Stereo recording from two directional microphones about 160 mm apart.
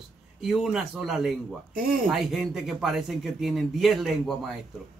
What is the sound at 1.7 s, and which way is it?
Speech, 60° right (ahead or behind).